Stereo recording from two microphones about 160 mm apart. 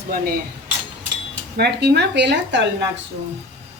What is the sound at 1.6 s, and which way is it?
A woman's voice, 90° right.